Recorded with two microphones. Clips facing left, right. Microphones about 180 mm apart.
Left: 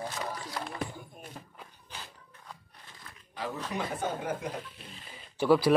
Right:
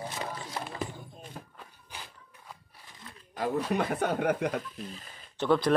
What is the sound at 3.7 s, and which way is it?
Speech, 60° right (ahead or behind).